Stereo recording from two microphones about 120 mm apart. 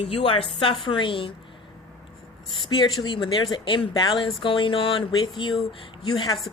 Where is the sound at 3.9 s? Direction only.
30° left (ahead or behind).